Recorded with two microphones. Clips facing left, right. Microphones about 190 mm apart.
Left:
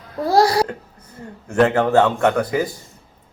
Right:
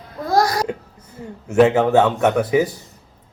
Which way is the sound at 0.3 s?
30° left (ahead or behind).